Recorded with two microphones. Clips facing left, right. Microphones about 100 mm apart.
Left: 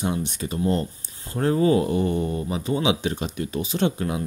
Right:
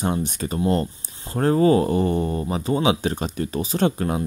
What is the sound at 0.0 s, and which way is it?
Speech, 45° right (ahead or behind).